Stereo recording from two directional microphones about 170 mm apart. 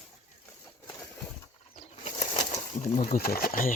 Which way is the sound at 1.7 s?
40° left (ahead or behind).